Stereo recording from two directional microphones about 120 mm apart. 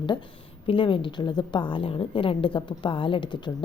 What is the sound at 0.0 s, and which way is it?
A woman's voice, 40° left (ahead or behind).